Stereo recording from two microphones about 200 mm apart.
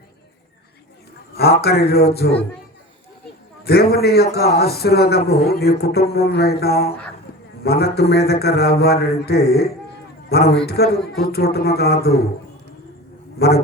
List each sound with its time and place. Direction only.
1.6 s speech: 50° left (ahead or behind)
3.6 s a man's voice: 50° left (ahead or behind)